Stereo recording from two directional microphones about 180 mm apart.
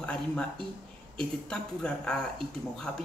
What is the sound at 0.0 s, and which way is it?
Speech, 5° left (ahead or behind).